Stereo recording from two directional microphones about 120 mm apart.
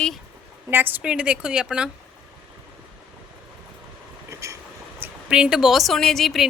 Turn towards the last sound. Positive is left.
turn(degrees=0)  # may be behind; listen again after turning